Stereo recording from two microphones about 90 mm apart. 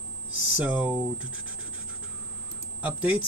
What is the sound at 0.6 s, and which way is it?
Speech, 15° right (ahead or behind).